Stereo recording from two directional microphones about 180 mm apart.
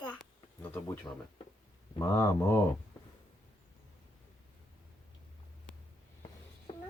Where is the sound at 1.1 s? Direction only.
15° left (ahead or behind).